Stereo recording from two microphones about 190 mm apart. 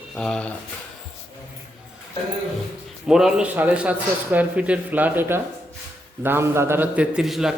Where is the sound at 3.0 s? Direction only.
5° right (ahead or behind).